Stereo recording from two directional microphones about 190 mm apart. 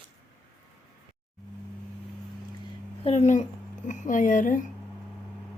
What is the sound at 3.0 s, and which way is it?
Speech, 35° left (ahead or behind).